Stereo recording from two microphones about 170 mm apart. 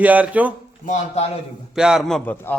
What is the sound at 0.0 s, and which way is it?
Speech, 10° right (ahead or behind).